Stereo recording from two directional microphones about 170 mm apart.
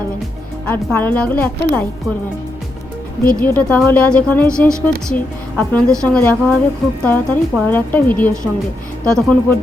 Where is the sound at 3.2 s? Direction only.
55° left (ahead or behind).